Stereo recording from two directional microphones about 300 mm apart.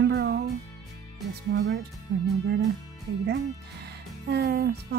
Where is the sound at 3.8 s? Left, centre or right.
Right.